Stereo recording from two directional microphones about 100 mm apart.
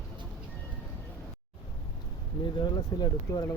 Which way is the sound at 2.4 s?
45° left (ahead or behind).